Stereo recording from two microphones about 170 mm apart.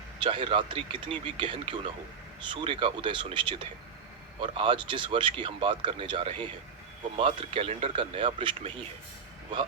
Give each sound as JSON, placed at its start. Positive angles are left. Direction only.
{"t": 0.2, "sound": "speech", "side_deg": -30}